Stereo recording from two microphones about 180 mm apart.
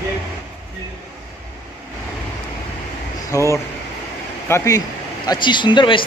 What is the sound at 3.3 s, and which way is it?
Speech, 15° left (ahead or behind).